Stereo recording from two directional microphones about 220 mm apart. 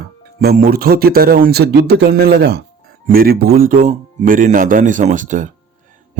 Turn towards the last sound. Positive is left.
turn(degrees=-35)  # may be behind; listen again after turning